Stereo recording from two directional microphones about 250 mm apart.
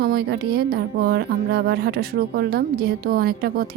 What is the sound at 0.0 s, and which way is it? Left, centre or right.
Speech, right.